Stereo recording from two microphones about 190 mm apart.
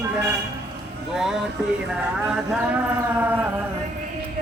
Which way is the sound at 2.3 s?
5° right (ahead or behind).